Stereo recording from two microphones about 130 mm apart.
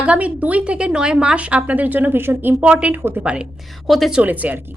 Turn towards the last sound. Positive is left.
turn(degrees=-10)  # may be behind; listen again after turning